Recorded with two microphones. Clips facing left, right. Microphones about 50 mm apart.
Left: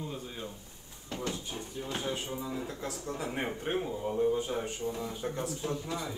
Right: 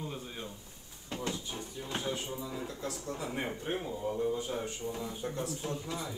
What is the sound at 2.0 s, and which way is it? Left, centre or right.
Speech, left.